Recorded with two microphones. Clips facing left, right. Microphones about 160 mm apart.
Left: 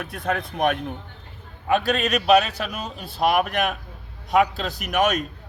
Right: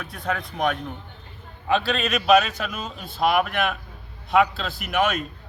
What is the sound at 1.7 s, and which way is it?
A man's voice, 45° left (ahead or behind).